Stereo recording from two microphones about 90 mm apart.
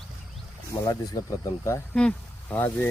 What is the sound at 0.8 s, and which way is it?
Speech, 45° left (ahead or behind).